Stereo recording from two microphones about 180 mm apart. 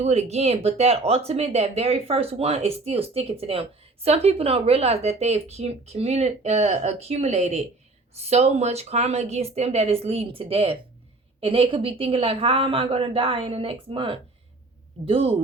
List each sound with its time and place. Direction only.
0.0 s speech: 35° right (ahead or behind)